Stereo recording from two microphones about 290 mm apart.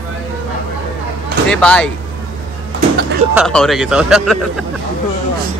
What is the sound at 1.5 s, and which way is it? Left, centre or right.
Speech, centre.